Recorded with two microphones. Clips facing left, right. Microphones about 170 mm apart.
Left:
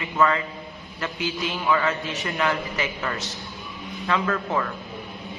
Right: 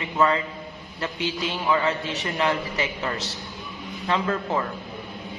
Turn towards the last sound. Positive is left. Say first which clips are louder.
# even
turn(degrees=-25)  # may be behind; listen again after turning